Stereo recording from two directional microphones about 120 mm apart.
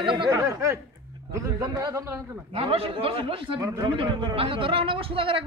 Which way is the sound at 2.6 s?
50° right (ahead or behind).